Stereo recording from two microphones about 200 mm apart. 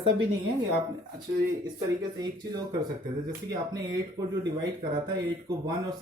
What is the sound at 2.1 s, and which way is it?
Speech, 20° right (ahead or behind).